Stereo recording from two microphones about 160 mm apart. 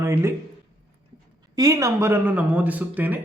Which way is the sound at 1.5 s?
20° right (ahead or behind).